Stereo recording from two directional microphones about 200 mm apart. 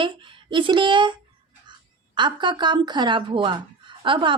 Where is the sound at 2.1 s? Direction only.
25° right (ahead or behind).